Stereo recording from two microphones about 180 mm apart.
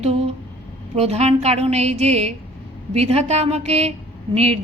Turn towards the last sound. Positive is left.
turn(degrees=-35)  # may be behind; listen again after turning